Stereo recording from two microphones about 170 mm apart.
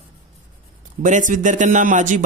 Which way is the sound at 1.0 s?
50° right (ahead or behind).